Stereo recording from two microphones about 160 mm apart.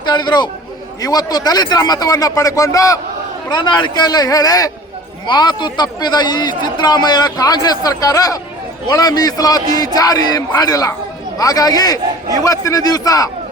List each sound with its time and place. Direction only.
0.0 s a man's voice: 25° left (ahead or behind)